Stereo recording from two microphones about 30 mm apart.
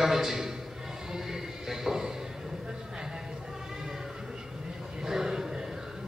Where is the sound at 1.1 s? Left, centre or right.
Centre.